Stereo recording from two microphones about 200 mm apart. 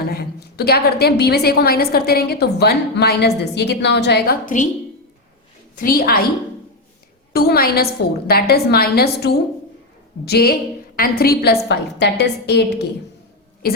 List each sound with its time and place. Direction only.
0.1 s a woman's voice: 50° left (ahead or behind)
5.8 s a woman's voice: 45° left (ahead or behind)
7.3 s a woman's voice: 50° left (ahead or behind)